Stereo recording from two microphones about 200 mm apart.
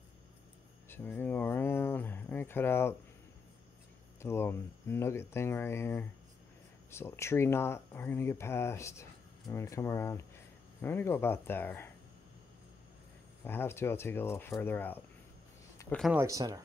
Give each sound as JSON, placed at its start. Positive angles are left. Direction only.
{"t": 0.8, "sound": "a sound", "side_deg": 10}
{"t": 4.2, "sound": "speech", "side_deg": 10}
{"t": 13.4, "sound": "speech", "side_deg": 10}
{"t": 16.0, "sound": "speech", "side_deg": -5}
{"t": 16.3, "sound": "speech", "side_deg": -15}